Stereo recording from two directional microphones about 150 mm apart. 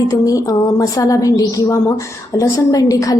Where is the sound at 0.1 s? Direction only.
20° left (ahead or behind).